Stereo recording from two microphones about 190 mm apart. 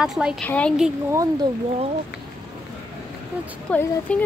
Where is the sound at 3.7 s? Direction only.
5° left (ahead or behind).